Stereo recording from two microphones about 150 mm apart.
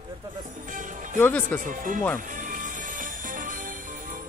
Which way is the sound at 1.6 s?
65° right (ahead or behind).